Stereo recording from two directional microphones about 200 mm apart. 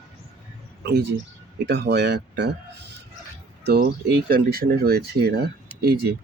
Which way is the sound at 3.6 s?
55° right (ahead or behind).